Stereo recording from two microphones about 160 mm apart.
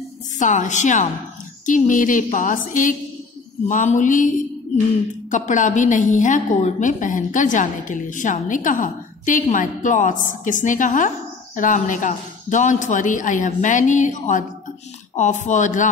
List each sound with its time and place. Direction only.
0.4 s a woman's voice: 50° left (ahead or behind)
1.7 s music: 55° left (ahead or behind)
3.6 s a woman's voice: 50° left (ahead or behind)
5.5 s a woman's voice: 50° left (ahead or behind)